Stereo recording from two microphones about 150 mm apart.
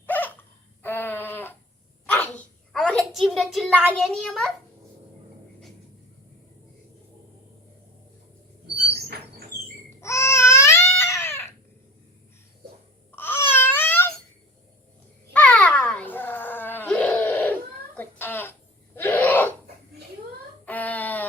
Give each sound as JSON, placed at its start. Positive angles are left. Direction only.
{"t": 0.0, "sound": "dog", "side_deg": 10}
{"t": 0.8, "sound": "a sound", "side_deg": 15}
{"t": 3.9, "sound": "a child's voice", "side_deg": 0}
{"t": 10.0, "sound": "babbling", "side_deg": 20}
{"t": 13.1, "sound": "babbling", "side_deg": 15}
{"t": 15.3, "sound": "a sound", "side_deg": 10}
{"t": 20.7, "sound": "baby cry", "side_deg": 10}